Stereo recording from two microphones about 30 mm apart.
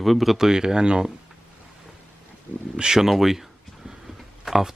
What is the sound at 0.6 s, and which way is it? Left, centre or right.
Speech, right.